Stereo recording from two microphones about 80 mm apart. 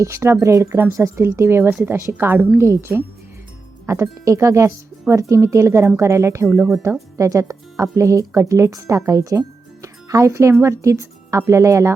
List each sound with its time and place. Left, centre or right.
0.0 s a woman's voice: right